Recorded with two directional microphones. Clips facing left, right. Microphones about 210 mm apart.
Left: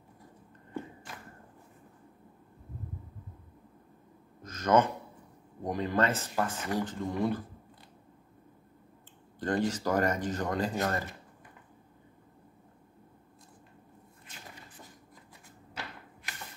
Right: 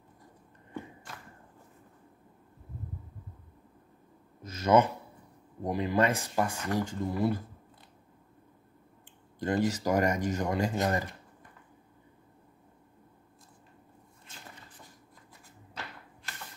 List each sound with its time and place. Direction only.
4.4 s a sound: 10° right (ahead or behind)
5.6 s speech: 10° right (ahead or behind)
9.4 s speech: 10° right (ahead or behind)